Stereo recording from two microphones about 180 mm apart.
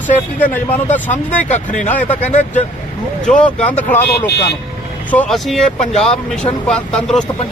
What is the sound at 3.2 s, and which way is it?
Speech, 5° left (ahead or behind).